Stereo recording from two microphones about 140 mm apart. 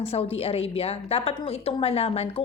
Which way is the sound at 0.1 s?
45° left (ahead or behind).